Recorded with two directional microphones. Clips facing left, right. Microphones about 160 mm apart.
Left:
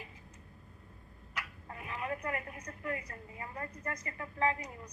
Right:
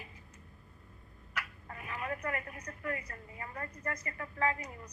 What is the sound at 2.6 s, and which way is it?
A woman's voice, 20° left (ahead or behind).